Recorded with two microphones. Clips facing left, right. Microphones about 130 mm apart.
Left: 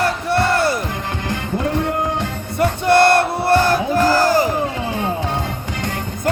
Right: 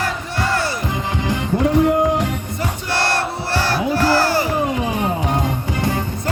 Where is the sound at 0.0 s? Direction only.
65° left (ahead or behind).